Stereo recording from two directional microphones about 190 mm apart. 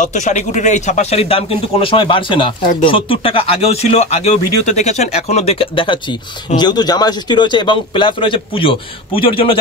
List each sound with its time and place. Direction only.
0.0 s speech: 40° left (ahead or behind)